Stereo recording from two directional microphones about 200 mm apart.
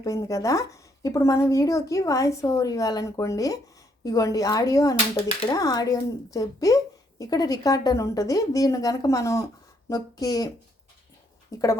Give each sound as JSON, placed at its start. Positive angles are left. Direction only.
{"t": 0.0, "sound": "speech", "side_deg": 15}